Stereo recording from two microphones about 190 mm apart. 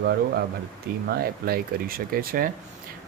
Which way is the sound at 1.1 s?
50° right (ahead or behind).